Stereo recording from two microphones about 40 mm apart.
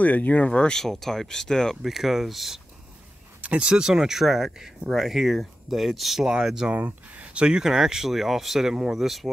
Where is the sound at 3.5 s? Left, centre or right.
Right.